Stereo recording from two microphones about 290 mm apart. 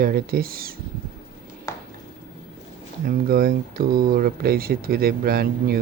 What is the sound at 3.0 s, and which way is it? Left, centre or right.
Speech, right.